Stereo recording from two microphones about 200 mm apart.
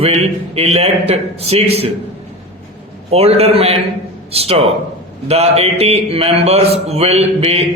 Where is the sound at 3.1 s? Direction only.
30° right (ahead or behind).